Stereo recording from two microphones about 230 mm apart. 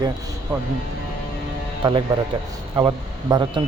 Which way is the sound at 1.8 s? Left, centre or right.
Centre.